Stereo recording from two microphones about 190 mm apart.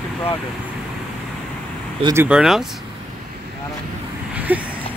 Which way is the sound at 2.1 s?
5° right (ahead or behind).